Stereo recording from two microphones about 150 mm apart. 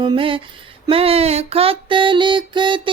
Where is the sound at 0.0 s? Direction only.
35° right (ahead or behind).